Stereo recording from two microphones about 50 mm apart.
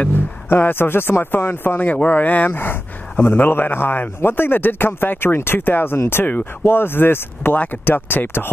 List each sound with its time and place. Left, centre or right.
0.6 s speech: left
7.5 s speech: left